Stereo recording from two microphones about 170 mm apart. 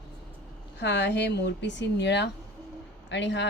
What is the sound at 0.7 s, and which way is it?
Speech, 90° left.